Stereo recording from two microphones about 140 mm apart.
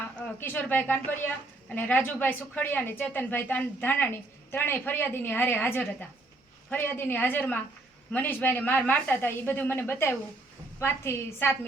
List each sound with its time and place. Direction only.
0.0 s a woman's voice: 15° left (ahead or behind)